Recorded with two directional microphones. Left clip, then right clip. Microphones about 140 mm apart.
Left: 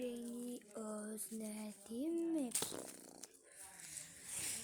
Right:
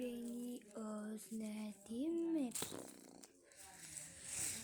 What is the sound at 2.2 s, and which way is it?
Speech, 30° left (ahead or behind).